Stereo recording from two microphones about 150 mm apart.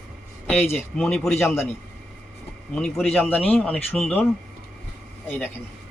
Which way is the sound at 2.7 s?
5° left (ahead or behind).